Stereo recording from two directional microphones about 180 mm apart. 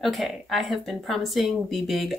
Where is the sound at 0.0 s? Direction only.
Centre (ahead or behind).